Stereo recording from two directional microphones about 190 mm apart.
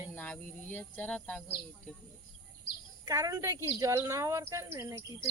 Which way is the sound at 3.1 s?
20° right (ahead or behind).